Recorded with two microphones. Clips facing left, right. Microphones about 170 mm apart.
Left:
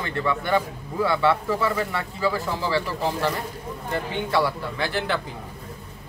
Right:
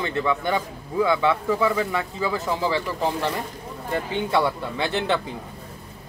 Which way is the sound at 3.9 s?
20° right (ahead or behind).